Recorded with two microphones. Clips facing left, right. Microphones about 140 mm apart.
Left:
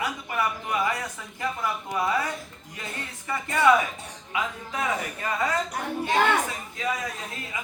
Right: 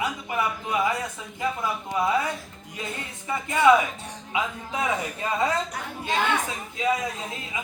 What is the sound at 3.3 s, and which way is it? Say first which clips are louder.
A man's voice: right 2 dB; 15° right (ahead or behind).